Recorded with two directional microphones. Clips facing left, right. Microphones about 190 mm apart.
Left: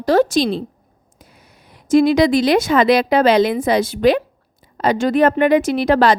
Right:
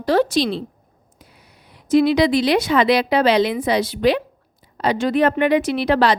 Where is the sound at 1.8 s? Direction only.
45° left (ahead or behind).